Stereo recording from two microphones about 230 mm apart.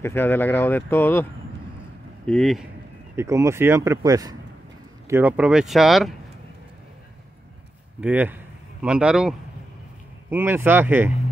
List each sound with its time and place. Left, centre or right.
0.0 s speech: centre
2.2 s speech: centre
3.2 s speech: centre
8.0 s speech: centre
10.3 s speech: centre